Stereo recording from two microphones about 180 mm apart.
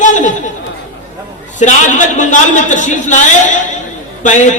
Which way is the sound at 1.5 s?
45° left (ahead or behind).